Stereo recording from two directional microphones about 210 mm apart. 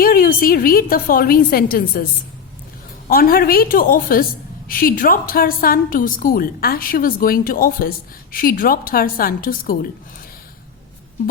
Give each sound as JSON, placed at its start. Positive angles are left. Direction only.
{"t": 0.0, "sound": "a woman's voice", "side_deg": 45}
{"t": 3.1, "sound": "a woman's voice", "side_deg": 45}